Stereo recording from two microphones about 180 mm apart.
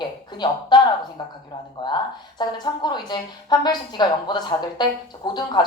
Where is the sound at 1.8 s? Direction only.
20° left (ahead or behind).